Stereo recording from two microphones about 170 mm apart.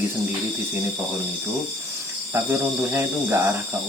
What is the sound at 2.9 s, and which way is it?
Speech, 15° right (ahead or behind).